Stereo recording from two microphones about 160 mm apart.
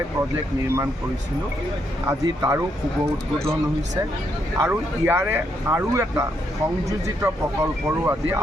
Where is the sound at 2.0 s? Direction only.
20° right (ahead or behind).